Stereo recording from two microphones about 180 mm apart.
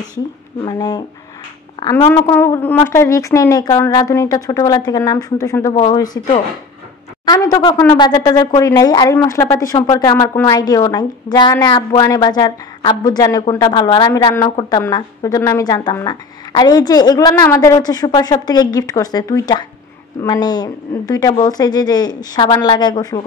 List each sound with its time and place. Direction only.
0.6 s a woman's voice: 20° left (ahead or behind)
5.7 s speech: 30° left (ahead or behind)
5.9 s a woman's voice: 20° left (ahead or behind)